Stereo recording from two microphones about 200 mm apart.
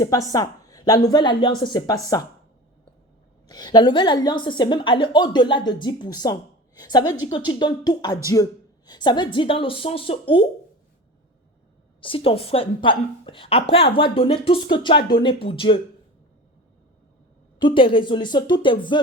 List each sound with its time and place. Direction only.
0.0 s a woman's voice: 15° left (ahead or behind)
3.5 s a woman's voice: 20° left (ahead or behind)
11.9 s a woman's voice: 25° left (ahead or behind)
17.6 s a woman's voice: 25° left (ahead or behind)